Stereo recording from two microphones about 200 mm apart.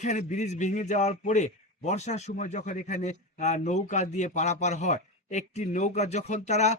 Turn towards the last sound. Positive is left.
turn(degrees=35)  # may be behind; listen again after turning